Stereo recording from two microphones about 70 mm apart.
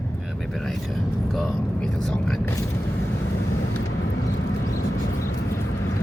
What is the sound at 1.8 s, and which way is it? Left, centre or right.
Speech, centre.